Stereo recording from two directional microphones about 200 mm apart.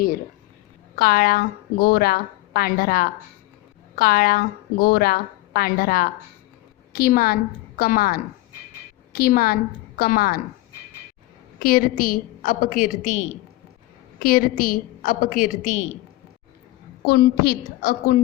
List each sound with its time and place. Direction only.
0.9 s a woman's voice: 50° left (ahead or behind)
11.6 s a woman's voice: 45° left (ahead or behind)
17.1 s a woman's voice: 50° left (ahead or behind)